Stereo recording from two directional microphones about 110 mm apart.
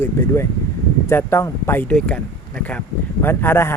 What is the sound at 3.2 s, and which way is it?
Speech, 20° left (ahead or behind).